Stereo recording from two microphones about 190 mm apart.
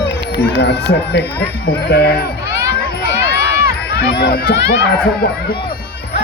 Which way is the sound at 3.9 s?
55° left (ahead or behind).